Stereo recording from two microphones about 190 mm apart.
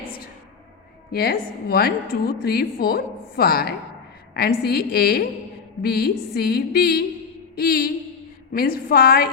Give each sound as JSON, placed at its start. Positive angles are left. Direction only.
{"t": 1.1, "sound": "a woman's voice", "side_deg": 55}
{"t": 7.5, "sound": "a sound", "side_deg": 55}
{"t": 8.5, "sound": "a woman's voice", "side_deg": 50}